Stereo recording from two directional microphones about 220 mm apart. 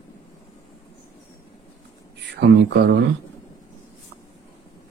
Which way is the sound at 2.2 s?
50° right (ahead or behind).